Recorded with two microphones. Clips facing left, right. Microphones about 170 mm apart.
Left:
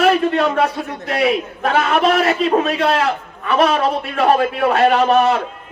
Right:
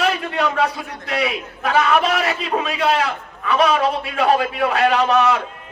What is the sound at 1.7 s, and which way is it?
A man's voice, 55° left (ahead or behind).